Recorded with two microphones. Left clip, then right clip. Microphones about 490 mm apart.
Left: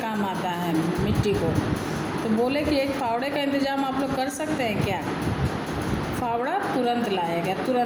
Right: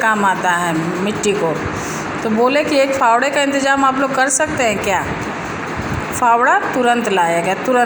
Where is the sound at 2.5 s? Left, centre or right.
Left.